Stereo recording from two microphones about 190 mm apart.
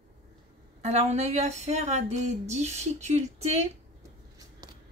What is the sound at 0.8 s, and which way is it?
Speech, 35° right (ahead or behind).